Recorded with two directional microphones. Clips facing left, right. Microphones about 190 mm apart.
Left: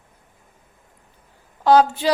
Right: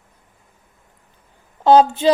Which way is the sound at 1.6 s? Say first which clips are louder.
Right 3 dB; 25° right (ahead or behind).